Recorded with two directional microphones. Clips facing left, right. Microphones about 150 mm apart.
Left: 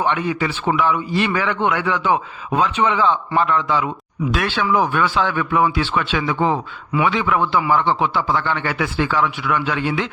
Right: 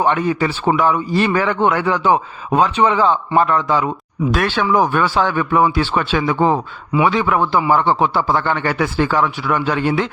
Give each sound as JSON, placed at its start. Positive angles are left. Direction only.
{"t": 0.0, "sound": "a man's voice", "side_deg": -40}